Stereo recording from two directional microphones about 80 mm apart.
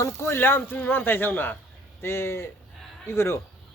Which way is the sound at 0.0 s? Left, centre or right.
Left.